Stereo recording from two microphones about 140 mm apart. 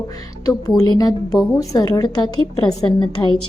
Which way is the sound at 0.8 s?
30° left (ahead or behind).